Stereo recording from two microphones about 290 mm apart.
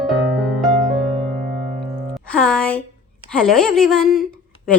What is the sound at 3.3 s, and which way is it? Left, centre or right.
Speech, centre.